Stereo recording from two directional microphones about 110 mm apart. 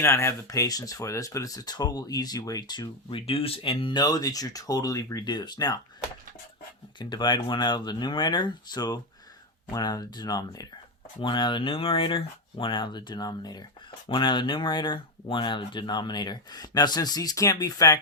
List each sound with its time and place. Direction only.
0.0 s speech: 25° left (ahead or behind); by 3.2 s 40° left (ahead or behind)
3.2 s speech: 60° left (ahead or behind)
3.9 s speech: 35° left (ahead or behind)
7.0 s speech: 40° left (ahead or behind)